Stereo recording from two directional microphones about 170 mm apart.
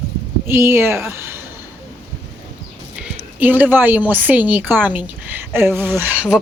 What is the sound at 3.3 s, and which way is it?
Speech, 10° right (ahead or behind).